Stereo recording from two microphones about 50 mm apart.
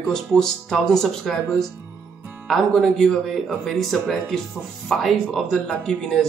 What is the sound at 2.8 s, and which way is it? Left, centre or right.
A man's voice, centre.